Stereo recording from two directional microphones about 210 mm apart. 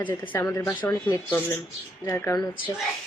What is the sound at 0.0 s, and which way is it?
Speech, 10° left (ahead or behind).